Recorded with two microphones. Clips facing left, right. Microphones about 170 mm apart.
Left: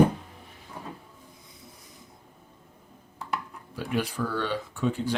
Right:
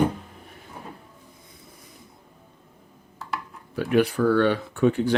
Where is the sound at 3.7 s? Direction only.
60° right (ahead or behind).